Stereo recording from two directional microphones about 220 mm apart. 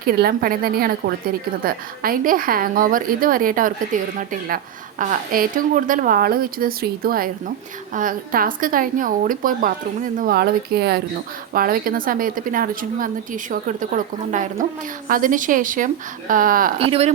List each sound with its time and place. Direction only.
0.0 s a woman's voice: 40° right (ahead or behind)
16.7 s speech: 25° right (ahead or behind)